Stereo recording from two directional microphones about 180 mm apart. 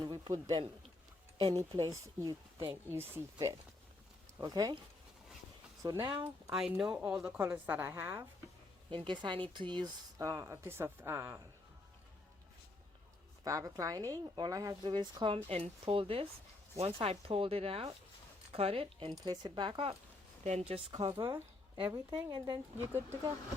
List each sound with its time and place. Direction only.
0.0 s speech: 25° right (ahead or behind)
1.5 s a woman's voice: 20° right (ahead or behind)
5.8 s speech: 20° right (ahead or behind)
6.5 s a woman's voice: 5° right (ahead or behind)
8.9 s speech: 25° right (ahead or behind)
13.4 s speech: 15° right (ahead or behind)